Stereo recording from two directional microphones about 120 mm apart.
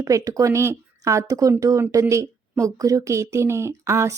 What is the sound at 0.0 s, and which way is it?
A woman's voice, 30° right (ahead or behind).